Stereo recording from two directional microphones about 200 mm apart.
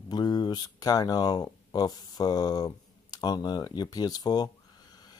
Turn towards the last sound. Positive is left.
turn(degrees=20)  # may be behind; listen again after turning